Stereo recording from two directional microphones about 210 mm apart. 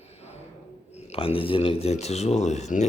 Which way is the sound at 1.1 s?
25° left (ahead or behind).